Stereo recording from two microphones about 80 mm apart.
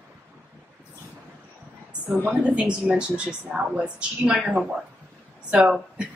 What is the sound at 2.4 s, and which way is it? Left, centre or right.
A woman's voice, centre.